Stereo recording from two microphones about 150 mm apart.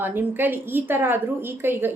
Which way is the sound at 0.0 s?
15° right (ahead or behind).